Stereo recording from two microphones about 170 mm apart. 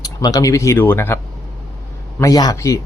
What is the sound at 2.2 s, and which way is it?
Speech, 20° left (ahead or behind).